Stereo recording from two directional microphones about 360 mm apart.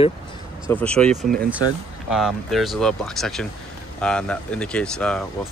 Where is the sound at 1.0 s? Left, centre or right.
Centre.